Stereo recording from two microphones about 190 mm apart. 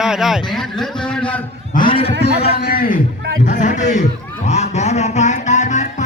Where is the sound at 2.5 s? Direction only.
50° left (ahead or behind).